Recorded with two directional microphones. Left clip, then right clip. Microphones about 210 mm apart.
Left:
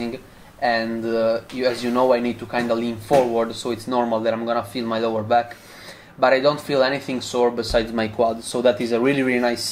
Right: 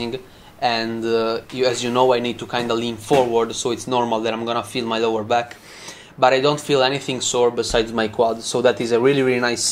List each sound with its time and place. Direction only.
0.6 s speech: 30° right (ahead or behind)
7.9 s speech: 20° right (ahead or behind)